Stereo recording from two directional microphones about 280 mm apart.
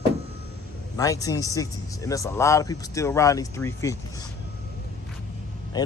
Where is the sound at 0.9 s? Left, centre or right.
Centre.